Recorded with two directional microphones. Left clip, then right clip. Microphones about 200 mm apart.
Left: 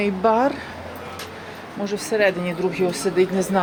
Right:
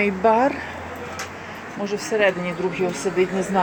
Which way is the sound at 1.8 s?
15° left (ahead or behind).